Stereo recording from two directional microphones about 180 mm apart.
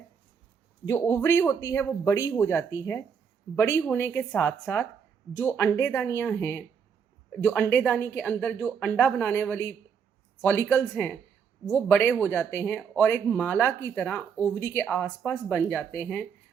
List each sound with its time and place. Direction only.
0.9 s a woman's voice: 15° left (ahead or behind)